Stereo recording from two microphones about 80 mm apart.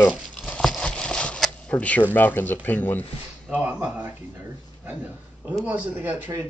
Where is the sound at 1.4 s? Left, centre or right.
Centre.